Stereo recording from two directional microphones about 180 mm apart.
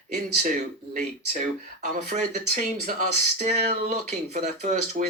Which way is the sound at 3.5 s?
40° right (ahead or behind).